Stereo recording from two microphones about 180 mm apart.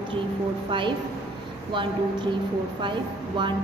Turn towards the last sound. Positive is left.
turn(degrees=-25)  # may be behind; listen again after turning